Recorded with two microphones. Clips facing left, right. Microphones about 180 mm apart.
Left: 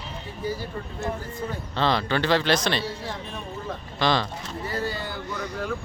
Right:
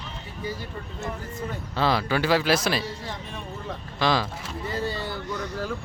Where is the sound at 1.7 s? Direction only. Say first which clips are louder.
Even; 5° right (ahead or behind).